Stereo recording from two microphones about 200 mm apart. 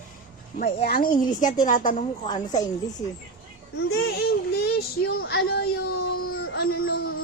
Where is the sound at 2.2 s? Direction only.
20° left (ahead or behind).